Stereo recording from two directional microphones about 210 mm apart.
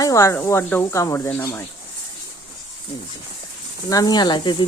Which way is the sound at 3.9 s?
20° left (ahead or behind).